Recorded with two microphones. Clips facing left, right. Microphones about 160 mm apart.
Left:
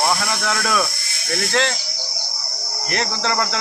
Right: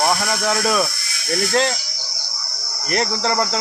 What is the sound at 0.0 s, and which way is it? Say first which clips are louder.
Speech: right 2 dB; 35° right (ahead or behind).